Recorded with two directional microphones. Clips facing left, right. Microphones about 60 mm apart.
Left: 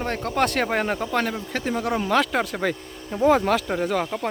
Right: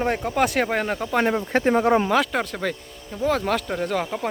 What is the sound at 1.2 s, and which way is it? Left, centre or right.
Speech, right.